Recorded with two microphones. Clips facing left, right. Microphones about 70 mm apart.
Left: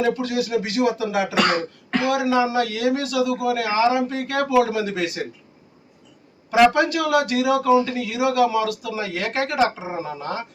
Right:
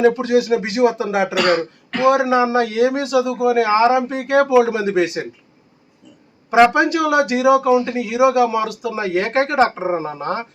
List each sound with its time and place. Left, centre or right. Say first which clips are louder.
0.0 s a man's voice: right 7 dB; right
1.5 s speech: right 5 dB; left
2.0 s a man's voice: right 5 dB; right
6.5 s a man's voice: right 3 dB; right